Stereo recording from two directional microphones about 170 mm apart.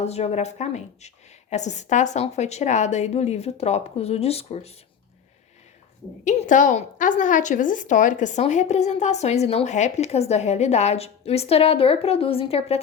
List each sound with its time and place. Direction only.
0.0 s a woman's voice: 40° left (ahead or behind)
6.2 s a woman's voice: 45° left (ahead or behind)